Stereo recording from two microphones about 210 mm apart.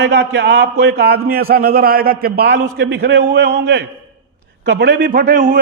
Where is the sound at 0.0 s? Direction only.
55° right (ahead or behind).